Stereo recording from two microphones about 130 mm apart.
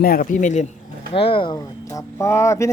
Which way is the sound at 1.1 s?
45° left (ahead or behind).